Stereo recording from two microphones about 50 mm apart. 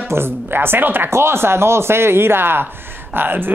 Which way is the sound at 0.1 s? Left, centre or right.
Right.